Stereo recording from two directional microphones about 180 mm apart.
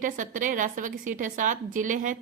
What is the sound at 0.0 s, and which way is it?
A woman's voice, 45° right (ahead or behind).